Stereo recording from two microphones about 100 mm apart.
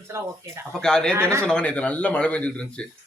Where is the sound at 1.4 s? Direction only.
10° left (ahead or behind).